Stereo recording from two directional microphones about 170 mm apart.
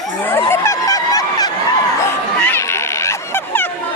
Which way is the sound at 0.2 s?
15° left (ahead or behind).